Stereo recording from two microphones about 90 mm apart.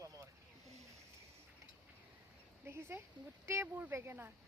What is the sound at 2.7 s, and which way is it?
Speech, 25° right (ahead or behind).